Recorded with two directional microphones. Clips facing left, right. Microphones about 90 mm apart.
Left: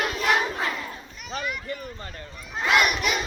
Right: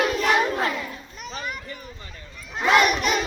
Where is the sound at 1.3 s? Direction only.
40° right (ahead or behind).